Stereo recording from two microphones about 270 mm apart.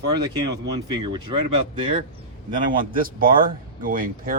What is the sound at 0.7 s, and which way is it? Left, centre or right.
Speech, centre.